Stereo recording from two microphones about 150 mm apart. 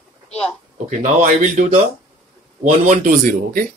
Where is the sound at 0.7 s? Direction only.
55° right (ahead or behind); by 3.7 s 75° right (ahead or behind).